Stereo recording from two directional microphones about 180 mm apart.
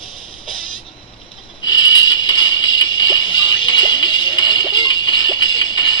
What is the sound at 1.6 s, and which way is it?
Music, 20° left (ahead or behind).